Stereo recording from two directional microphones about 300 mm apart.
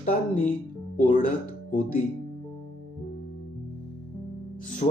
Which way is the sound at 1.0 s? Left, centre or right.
Left.